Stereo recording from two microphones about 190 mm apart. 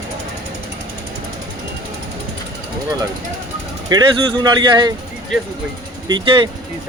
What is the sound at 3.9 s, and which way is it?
Speech, 25° right (ahead or behind).